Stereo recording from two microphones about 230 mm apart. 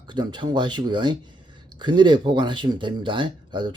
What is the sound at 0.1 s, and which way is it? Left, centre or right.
Speech, centre.